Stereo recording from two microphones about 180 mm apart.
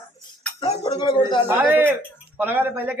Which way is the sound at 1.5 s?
10° right (ahead or behind).